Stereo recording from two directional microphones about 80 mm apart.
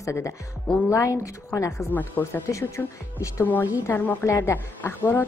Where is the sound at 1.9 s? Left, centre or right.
Left.